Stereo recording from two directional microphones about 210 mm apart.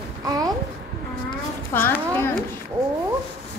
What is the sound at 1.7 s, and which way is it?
Speech, 10° left (ahead or behind).